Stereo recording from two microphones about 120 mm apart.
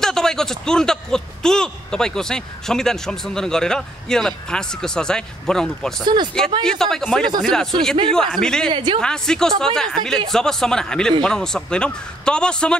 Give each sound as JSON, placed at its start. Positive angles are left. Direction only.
{"t": 0.0, "sound": "speech", "side_deg": 5}
{"t": 8.7, "sound": "speech", "side_deg": -45}
{"t": 9.0, "sound": "a man's voice", "side_deg": 5}